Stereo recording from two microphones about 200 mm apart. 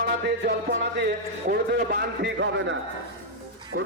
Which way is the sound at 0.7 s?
50° right (ahead or behind).